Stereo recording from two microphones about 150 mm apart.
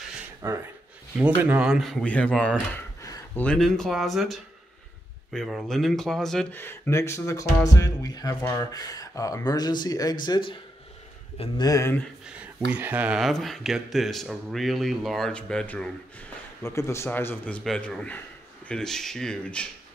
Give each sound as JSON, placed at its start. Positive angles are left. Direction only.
{"t": 0.4, "sound": "speech", "side_deg": -20}
{"t": 3.0, "sound": "a sound", "side_deg": 20}
{"t": 3.4, "sound": "speech", "side_deg": 5}
{"t": 12.4, "sound": "speech", "side_deg": -10}
{"t": 16.6, "sound": "speech", "side_deg": 20}